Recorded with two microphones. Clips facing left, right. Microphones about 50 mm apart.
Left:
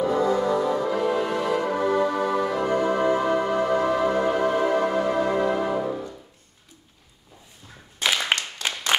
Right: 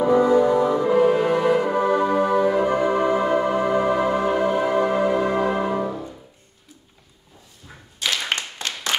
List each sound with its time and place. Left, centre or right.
0.0 s music: right
8.0 s clapping: centre